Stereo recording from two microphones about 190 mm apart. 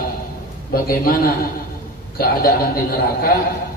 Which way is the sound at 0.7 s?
50° left (ahead or behind).